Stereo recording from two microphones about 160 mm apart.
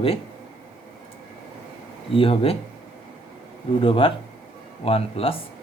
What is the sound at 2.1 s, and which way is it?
Speech, 35° left (ahead or behind).